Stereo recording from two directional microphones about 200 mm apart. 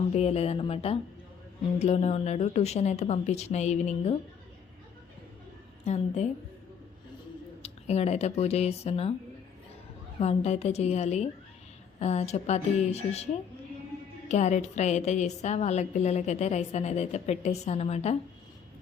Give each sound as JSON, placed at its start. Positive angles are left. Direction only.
{"t": 0.1, "sound": "a woman's voice", "side_deg": 30}
{"t": 5.8, "sound": "a woman's voice", "side_deg": 35}
{"t": 7.6, "sound": "speech", "side_deg": 30}
{"t": 10.2, "sound": "a woman's voice", "side_deg": 30}
{"t": 14.3, "sound": "a woman's voice", "side_deg": 35}